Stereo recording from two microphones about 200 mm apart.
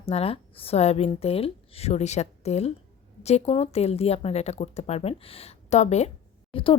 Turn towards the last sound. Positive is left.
turn(degrees=30)  # may be behind; listen again after turning